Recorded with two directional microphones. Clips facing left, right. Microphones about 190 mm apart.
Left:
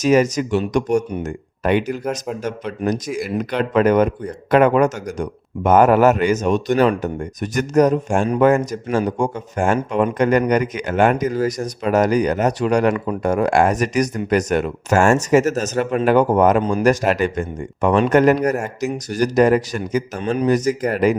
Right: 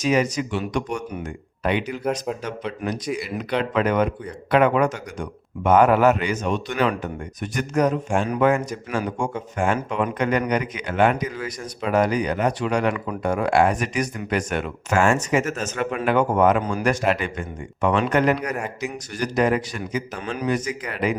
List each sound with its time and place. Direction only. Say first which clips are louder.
0.0 s a man's voice: left 5 dB; 45° left (ahead or behind)
2.8 s speech: left 8 dB; 30° left (ahead or behind)
3.6 s a man's voice: left 6 dB; 45° left (ahead or behind)